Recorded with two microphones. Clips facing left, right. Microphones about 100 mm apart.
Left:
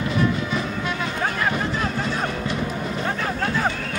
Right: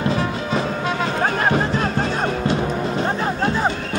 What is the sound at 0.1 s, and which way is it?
Music, 35° right (ahead or behind).